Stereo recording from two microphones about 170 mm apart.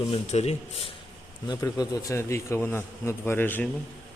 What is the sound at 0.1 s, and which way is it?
Speech, 40° left (ahead or behind).